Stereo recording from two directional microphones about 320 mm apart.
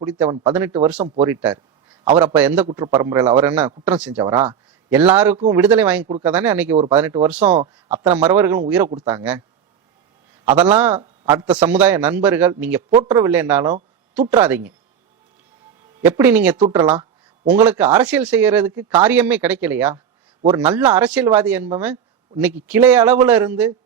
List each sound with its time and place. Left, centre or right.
0.0 s a man's voice: centre
7.5 s speech: right
8.1 s a man's voice: centre
10.4 s a man's voice: centre
16.0 s speech: centre
16.6 s a man's voice: centre